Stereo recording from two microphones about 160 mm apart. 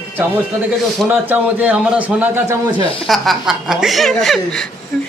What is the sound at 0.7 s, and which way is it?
A man's voice, 10° right (ahead or behind).